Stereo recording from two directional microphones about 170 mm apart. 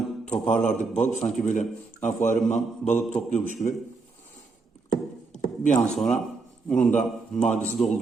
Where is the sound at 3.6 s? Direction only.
30° left (ahead or behind).